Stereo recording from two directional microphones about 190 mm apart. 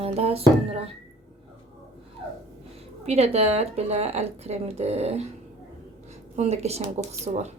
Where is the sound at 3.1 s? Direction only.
35° right (ahead or behind).